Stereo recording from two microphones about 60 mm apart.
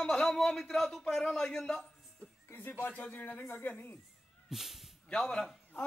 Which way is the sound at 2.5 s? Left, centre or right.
Left.